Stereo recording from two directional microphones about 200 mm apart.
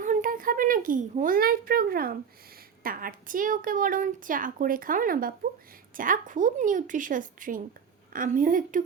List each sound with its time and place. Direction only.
0.0 s a woman's voice: 40° right (ahead or behind)